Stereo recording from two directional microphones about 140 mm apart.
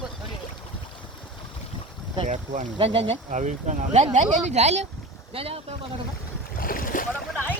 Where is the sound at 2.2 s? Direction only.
60° right (ahead or behind).